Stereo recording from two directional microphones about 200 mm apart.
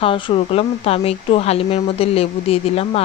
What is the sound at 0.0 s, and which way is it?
A woman's voice, 30° left (ahead or behind).